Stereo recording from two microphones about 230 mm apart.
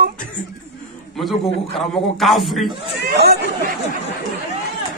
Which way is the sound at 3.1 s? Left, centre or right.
Right.